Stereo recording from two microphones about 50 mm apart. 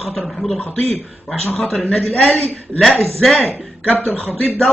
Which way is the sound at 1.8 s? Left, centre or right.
Left.